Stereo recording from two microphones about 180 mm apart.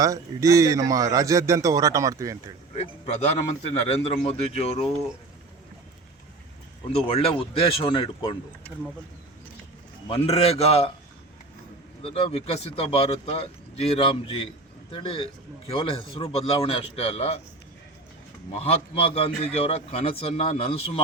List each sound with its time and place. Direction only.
0.0 s a man's voice: 20° right (ahead or behind)
2.7 s a man's voice: 35° left (ahead or behind)
6.9 s a man's voice: 30° left (ahead or behind)
10.1 s a man's voice: 35° left (ahead or behind)
12.0 s a man's voice: 30° left (ahead or behind)
18.5 s a man's voice: 35° left (ahead or behind)